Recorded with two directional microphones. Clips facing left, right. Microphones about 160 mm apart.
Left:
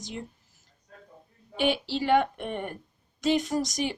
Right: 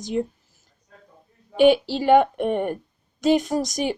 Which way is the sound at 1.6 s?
45° right (ahead or behind).